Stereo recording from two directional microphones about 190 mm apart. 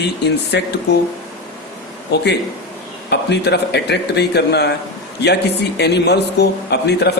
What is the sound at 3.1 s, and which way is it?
Speech, 60° left (ahead or behind).